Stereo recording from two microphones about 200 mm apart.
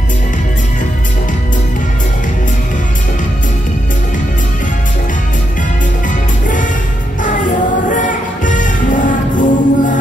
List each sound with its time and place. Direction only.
6.0 s music: 40° left (ahead or behind)
7.9 s music: 40° left (ahead or behind)